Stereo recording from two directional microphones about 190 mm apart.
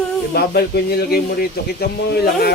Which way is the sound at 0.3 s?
55° left (ahead or behind).